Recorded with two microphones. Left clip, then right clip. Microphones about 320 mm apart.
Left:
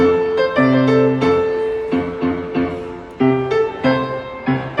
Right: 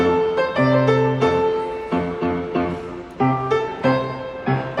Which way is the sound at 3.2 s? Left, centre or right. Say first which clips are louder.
Left 3 dB; centre.